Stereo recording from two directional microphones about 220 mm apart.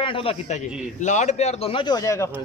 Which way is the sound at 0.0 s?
25° left (ahead or behind).